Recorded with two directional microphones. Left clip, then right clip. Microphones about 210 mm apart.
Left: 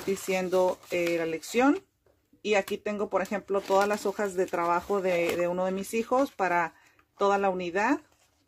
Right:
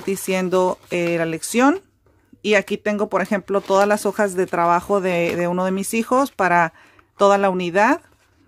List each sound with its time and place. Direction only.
0.1 s speech: 35° right (ahead or behind)